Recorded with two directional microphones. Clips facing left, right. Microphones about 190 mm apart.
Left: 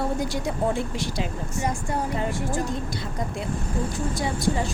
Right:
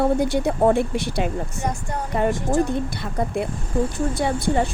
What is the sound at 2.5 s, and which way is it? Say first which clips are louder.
A woman's voice: right 6 dB; 60° right (ahead or behind).